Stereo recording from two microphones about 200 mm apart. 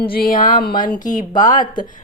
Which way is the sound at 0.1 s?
45° left (ahead or behind).